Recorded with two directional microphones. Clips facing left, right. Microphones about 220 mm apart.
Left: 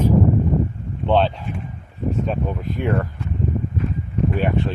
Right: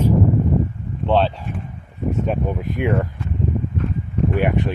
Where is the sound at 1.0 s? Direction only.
Centre (ahead or behind).